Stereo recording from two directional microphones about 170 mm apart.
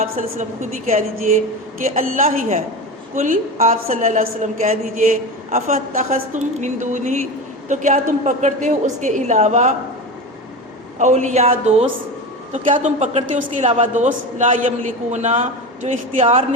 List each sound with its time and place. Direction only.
0.9 s a woman's voice: 45° right (ahead or behind)
10.9 s a woman's voice: 45° right (ahead or behind)